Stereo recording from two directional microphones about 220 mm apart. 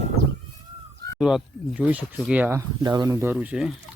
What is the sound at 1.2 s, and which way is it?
Speech, centre (ahead or behind).